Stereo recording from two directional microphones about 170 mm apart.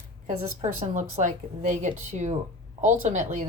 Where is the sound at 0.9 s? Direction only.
45° right (ahead or behind).